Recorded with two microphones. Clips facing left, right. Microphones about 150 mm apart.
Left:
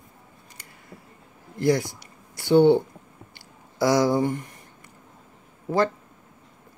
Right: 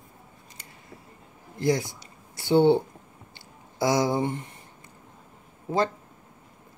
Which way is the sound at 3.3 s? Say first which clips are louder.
Left 1 dB; 20° right (ahead or behind).